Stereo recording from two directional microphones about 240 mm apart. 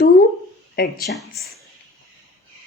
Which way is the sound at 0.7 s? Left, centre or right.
Left.